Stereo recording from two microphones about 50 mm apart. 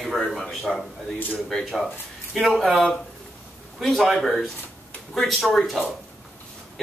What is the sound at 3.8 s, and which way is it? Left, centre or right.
Speech, centre.